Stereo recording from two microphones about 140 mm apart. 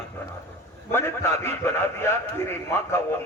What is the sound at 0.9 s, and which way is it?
A man's voice, 15° left (ahead or behind).